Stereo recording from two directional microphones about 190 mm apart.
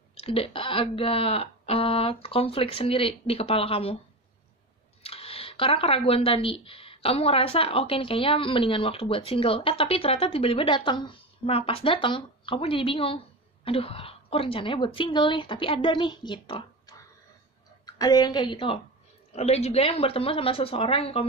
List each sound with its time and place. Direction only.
0.1 s speech: 30° left (ahead or behind)
5.0 s a woman's voice: 30° left (ahead or behind)